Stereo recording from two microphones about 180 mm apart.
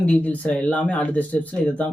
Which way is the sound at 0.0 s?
10° left (ahead or behind).